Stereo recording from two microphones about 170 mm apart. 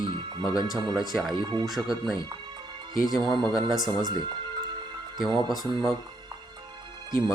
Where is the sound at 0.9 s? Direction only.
Centre (ahead or behind).